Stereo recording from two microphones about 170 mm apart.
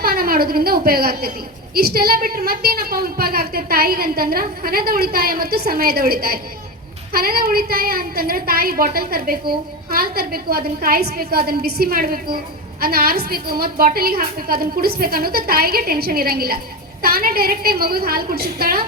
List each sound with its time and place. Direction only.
0.0 s a woman's voice: 60° right (ahead or behind)